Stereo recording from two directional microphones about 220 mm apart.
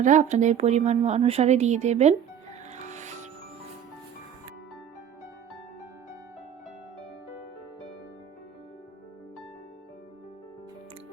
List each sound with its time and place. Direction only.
0.0 s speech: 35° right (ahead or behind)
2.7 s music: 30° right (ahead or behind)